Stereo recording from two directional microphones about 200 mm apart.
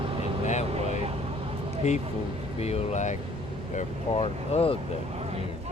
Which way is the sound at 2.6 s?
35° left (ahead or behind).